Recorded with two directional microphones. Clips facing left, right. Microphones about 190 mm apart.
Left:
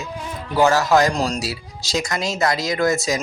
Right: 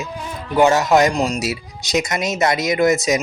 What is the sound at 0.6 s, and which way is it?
Speech, 20° right (ahead or behind).